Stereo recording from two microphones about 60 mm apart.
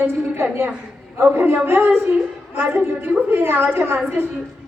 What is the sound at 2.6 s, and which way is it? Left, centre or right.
A woman's voice, right.